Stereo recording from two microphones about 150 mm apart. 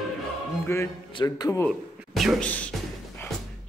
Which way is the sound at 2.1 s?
Centre (ahead or behind).